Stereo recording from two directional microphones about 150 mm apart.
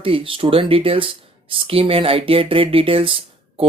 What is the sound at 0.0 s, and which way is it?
Speech, 35° right (ahead or behind).